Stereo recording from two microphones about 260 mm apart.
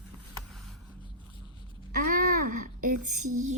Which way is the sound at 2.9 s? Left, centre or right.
Right.